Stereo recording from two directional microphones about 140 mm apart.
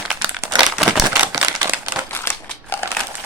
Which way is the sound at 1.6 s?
20° right (ahead or behind).